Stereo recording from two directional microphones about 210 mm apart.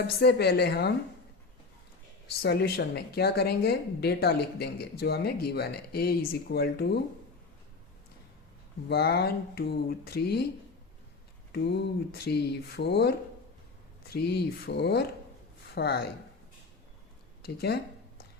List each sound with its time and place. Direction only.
0.2 s speech: 50° left (ahead or behind)
2.4 s speech: 50° left (ahead or behind)
8.9 s speech: 50° left (ahead or behind)
12.1 s speech: 50° left (ahead or behind)
17.4 s speech: 50° left (ahead or behind)